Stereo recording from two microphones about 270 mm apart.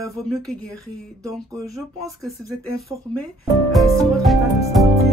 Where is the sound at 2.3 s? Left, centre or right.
Left.